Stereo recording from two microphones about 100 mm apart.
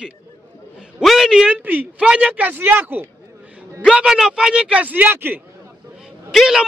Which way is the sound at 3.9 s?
10° right (ahead or behind).